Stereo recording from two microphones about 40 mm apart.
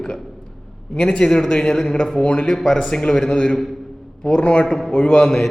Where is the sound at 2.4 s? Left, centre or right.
Centre.